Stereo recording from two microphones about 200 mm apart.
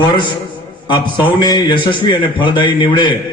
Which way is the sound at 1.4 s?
20° left (ahead or behind).